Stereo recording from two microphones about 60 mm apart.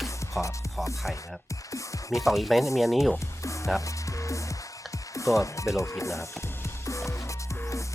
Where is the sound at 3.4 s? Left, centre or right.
Left.